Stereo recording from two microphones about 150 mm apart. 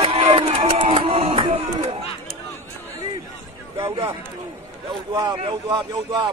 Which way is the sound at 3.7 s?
35° right (ahead or behind).